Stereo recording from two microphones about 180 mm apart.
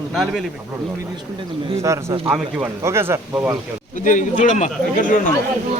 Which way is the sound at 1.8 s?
15° right (ahead or behind).